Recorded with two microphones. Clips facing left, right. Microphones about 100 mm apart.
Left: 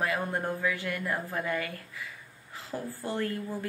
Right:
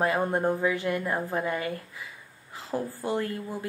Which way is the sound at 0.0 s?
30° right (ahead or behind).